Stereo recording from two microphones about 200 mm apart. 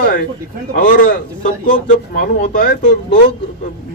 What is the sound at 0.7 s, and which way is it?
Speech, 40° left (ahead or behind).